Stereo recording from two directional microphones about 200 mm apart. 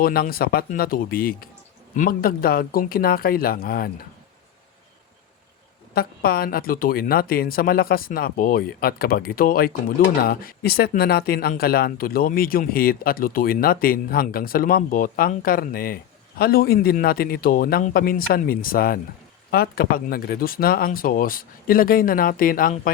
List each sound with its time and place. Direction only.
0.0 s speech: 50° left (ahead or behind)
5.9 s speech: 50° left (ahead or behind)